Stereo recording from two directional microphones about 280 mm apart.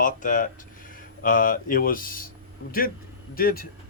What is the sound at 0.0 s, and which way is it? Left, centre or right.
Speech, left.